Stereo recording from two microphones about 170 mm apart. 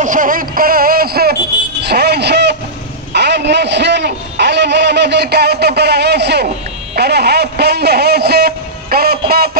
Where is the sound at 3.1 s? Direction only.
90° right.